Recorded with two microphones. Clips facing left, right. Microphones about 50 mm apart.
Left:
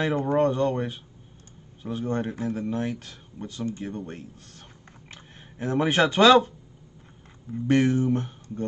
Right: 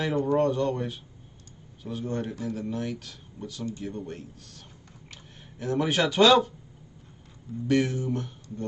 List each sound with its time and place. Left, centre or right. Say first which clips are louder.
0.0 s speech: left 1 dB; left
7.6 s speech: left 4 dB; left